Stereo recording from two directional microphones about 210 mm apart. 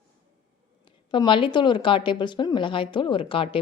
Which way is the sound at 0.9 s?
20° left (ahead or behind).